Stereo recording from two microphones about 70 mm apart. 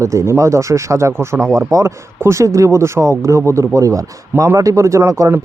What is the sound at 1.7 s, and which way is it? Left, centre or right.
Speech, right.